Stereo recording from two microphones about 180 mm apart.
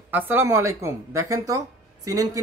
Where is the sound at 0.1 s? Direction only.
10° right (ahead or behind).